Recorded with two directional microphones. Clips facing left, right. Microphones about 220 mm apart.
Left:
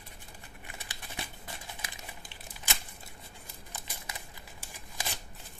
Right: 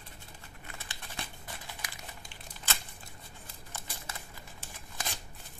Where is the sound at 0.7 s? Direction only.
15° left (ahead or behind).